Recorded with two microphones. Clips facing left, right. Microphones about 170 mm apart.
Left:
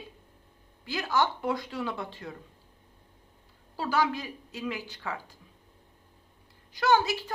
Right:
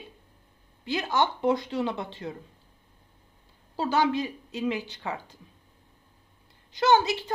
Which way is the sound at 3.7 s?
25° right (ahead or behind).